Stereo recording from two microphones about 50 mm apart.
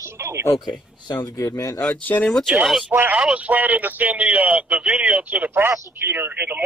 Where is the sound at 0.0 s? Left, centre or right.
Right.